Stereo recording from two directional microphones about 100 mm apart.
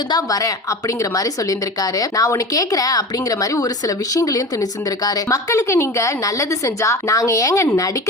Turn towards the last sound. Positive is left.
turn(degrees=30)  # may be behind; listen again after turning